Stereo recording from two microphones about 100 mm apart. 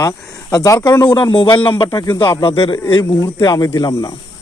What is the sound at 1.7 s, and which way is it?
Speech, 40° left (ahead or behind).